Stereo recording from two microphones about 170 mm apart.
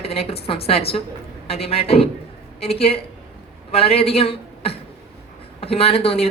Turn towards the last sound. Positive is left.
turn(degrees=35)  # may be behind; listen again after turning